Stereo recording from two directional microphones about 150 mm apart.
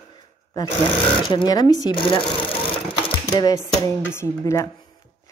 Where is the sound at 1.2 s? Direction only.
30° left (ahead or behind).